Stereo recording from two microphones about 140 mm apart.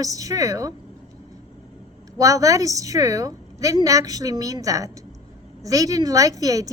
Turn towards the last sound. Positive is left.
turn(degrees=-25)  # may be behind; listen again after turning